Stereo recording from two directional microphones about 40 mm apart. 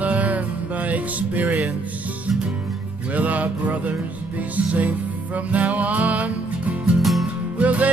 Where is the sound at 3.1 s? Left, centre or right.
Right.